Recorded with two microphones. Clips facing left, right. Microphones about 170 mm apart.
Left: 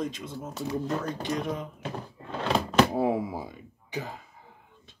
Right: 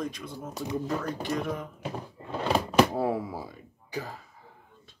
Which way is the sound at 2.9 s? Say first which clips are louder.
Left 2 dB; 20° left (ahead or behind).